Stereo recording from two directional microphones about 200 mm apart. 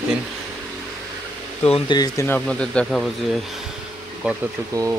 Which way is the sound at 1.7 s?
20° left (ahead or behind).